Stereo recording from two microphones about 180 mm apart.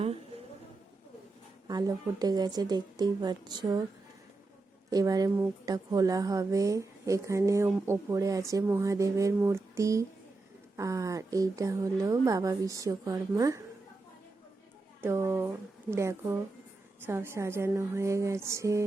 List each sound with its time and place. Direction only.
1.6 s speech: 20° right (ahead or behind)
4.9 s a woman's voice: 20° right (ahead or behind)
15.0 s a woman's voice: 15° right (ahead or behind)